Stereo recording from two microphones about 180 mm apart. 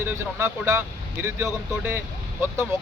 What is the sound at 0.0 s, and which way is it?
Speech, 15° right (ahead or behind).